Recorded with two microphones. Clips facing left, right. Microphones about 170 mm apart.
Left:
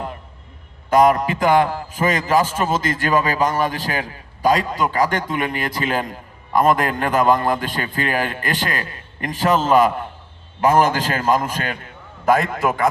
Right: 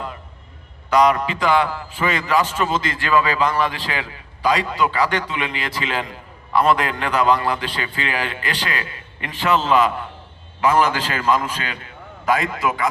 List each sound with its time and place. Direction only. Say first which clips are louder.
0.9 s a man's voice: left 2 dB; 45° left (ahead or behind)